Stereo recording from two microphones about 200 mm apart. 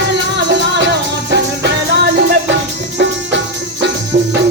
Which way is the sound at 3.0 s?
60° right (ahead or behind).